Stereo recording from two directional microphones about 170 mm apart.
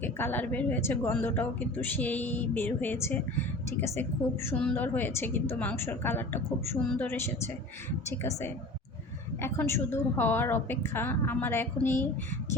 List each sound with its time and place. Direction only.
0.0 s a woman's voice: 10° left (ahead or behind)